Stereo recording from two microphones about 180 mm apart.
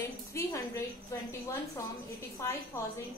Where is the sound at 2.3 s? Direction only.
15° left (ahead or behind).